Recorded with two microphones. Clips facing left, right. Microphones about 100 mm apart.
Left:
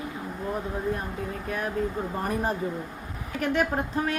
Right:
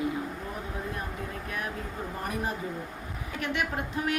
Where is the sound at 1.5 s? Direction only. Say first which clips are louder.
Left 5 dB; 35° left (ahead or behind).